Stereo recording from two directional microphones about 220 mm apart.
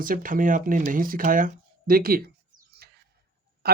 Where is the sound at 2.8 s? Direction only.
45° right (ahead or behind).